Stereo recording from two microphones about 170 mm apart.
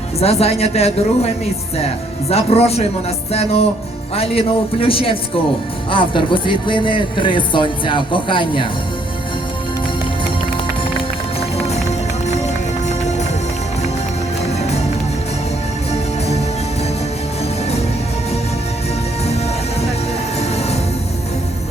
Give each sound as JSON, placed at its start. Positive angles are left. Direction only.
{"t": 0.2, "sound": "a woman's voice", "side_deg": 35}
{"t": 2.3, "sound": "a woman's voice", "side_deg": 35}
{"t": 12.9, "sound": "music", "side_deg": 40}
{"t": 15.9, "sound": "music", "side_deg": 40}
{"t": 20.4, "sound": "music", "side_deg": 40}